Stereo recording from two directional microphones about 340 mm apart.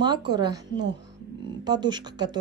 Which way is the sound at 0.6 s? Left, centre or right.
Right.